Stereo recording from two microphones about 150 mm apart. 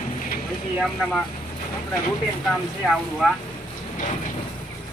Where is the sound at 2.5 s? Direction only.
5° left (ahead or behind).